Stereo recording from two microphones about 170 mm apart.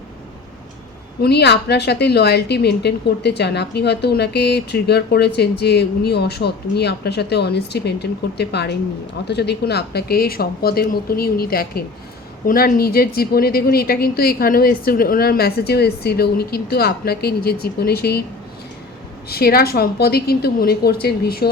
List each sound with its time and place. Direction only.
1.2 s a woman's voice: 75° left (ahead or behind)
19.3 s speech: 65° left (ahead or behind)